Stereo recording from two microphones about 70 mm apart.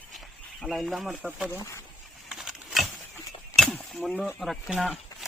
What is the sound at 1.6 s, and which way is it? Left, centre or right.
Speech, left.